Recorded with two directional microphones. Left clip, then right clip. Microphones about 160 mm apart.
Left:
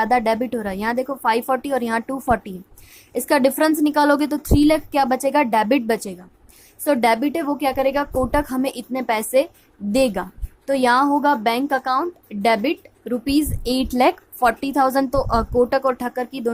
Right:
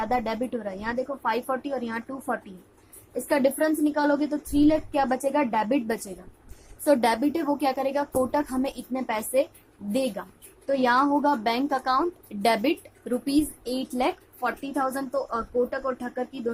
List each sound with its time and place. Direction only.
0.0 s a woman's voice: 40° left (ahead or behind); by 13.3 s 20° left (ahead or behind)
13.7 s a woman's voice: 50° left (ahead or behind)